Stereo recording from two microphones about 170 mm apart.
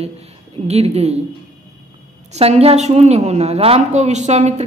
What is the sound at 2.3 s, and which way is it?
Speech, 35° right (ahead or behind).